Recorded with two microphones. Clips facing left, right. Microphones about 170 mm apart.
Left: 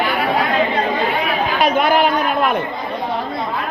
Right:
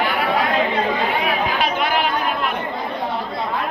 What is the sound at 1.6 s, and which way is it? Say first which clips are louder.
Chatter: left 6 dB; 45° left (ahead or behind).